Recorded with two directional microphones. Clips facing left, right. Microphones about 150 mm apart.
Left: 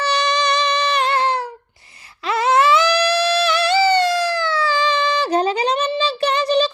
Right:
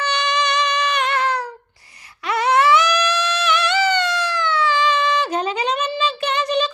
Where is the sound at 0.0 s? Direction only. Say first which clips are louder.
Left 2 dB; 35° left (ahead or behind).